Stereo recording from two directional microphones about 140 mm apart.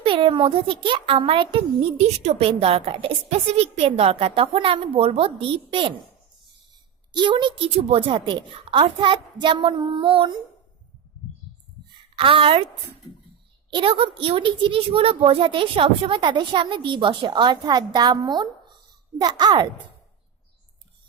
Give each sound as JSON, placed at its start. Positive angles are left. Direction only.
{"t": 0.0, "sound": "a child's voice", "side_deg": -40}
{"t": 7.2, "sound": "a child's voice", "side_deg": -35}
{"t": 12.1, "sound": "a child's voice", "side_deg": -40}
{"t": 13.7, "sound": "a child's voice", "side_deg": -40}